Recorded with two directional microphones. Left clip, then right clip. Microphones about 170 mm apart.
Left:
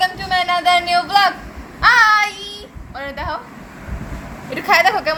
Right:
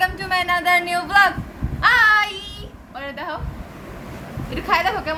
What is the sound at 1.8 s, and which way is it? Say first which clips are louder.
Child singing: left 3 dB; 15° left (ahead or behind).